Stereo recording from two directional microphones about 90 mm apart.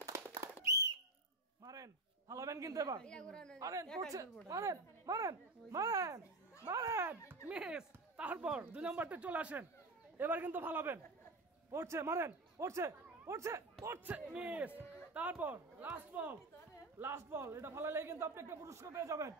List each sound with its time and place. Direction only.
0.0 s a sound: 35° right (ahead or behind)
0.7 s whistle: 45° right (ahead or behind)
1.6 s a sound: 40° right (ahead or behind)
3.0 s speech: 10° left (ahead or behind)
3.5 s a child's voice: 40° right (ahead or behind)
7.4 s a man's voice: 10° right (ahead or behind); by 14.0 s 30° right (ahead or behind)
14.0 s a man's voice: 15° right (ahead or behind); by 19.3 s 35° right (ahead or behind)